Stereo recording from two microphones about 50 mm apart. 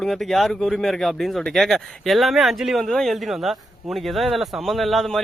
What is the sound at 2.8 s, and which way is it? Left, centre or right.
Speech, centre.